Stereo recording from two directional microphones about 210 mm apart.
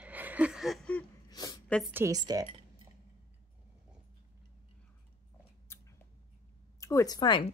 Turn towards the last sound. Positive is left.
turn(degrees=20)  # may be behind; listen again after turning